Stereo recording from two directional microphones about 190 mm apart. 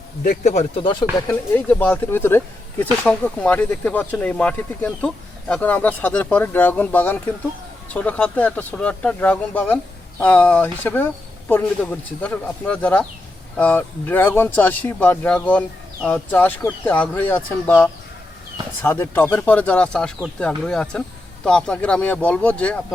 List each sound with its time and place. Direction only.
0.3 s speech: 35° left (ahead or behind)
1.3 s speech: 10° left (ahead or behind)